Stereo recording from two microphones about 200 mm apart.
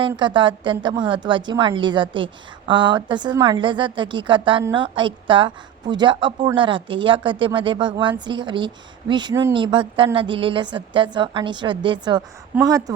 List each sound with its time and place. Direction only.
0.1 s a woman's voice: 25° right (ahead or behind)
12.5 s speech: 5° right (ahead or behind)